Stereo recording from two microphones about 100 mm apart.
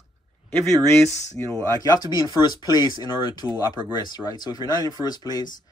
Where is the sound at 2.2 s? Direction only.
45° left (ahead or behind).